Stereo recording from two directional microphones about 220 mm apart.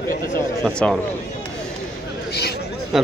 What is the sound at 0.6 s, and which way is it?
Speech, centre (ahead or behind).